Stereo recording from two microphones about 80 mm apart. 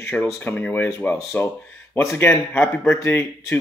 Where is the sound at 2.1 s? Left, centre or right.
Left.